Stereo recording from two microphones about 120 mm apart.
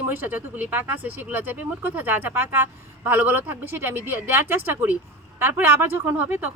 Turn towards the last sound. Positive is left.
turn(degrees=-15)  # may be behind; listen again after turning